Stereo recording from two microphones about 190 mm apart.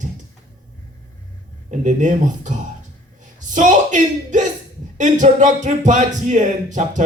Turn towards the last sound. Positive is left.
turn(degrees=-40)  # may be behind; listen again after turning